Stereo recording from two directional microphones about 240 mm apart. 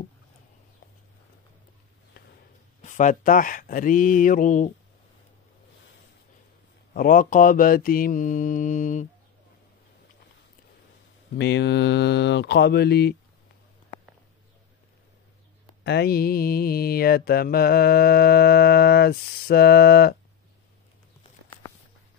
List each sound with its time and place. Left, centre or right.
2.8 s mantra: left
6.9 s mantra: left
11.3 s speech: left
15.8 s mantra: left